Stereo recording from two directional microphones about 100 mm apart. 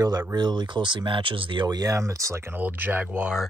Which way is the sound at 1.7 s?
40° right (ahead or behind).